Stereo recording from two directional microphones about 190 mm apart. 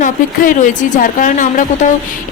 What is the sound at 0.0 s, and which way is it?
Speech, 45° left (ahead or behind).